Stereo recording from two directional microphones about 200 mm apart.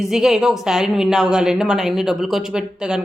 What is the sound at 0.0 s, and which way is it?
A woman's voice, centre (ahead or behind).